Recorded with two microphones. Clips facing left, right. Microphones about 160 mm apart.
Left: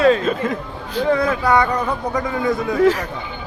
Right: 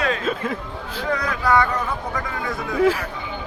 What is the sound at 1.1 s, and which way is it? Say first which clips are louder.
Speech: left 4 dB; 25° left (ahead or behind).